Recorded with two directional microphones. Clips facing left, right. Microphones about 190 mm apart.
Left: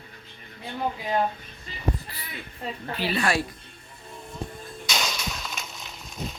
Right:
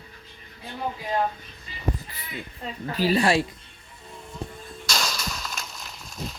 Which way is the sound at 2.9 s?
40° right (ahead or behind).